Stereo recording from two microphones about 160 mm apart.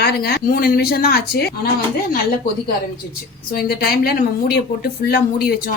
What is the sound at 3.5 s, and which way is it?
A woman's voice, 75° left (ahead or behind).